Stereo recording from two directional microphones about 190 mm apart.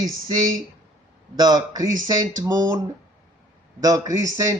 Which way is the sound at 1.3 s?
20° right (ahead or behind).